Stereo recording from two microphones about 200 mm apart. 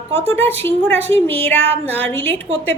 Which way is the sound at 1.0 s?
30° right (ahead or behind).